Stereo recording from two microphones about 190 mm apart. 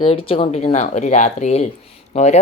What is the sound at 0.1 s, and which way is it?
Speech, 30° left (ahead or behind).